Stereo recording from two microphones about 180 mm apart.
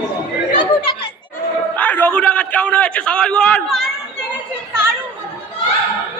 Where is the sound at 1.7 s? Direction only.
10° left (ahead or behind).